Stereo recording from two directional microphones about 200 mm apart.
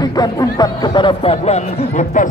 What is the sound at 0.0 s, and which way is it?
Speech, 20° left (ahead or behind).